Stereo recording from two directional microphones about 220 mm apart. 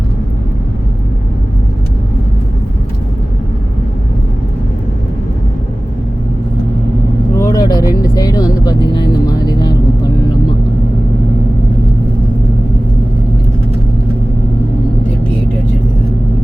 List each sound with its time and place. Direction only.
7.3 s vehicle: 15° left (ahead or behind)
8.1 s music: 15° left (ahead or behind)